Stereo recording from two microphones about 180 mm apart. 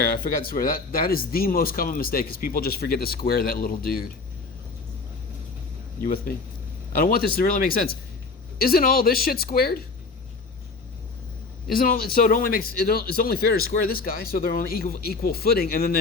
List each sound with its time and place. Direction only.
0.0 s speech: 55° left (ahead or behind)
6.0 s speech: 55° left (ahead or behind)
11.7 s speech: 50° left (ahead or behind)